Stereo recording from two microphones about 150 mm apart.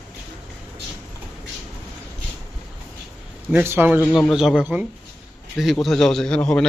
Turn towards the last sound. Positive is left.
turn(degrees=5)  # may be behind; listen again after turning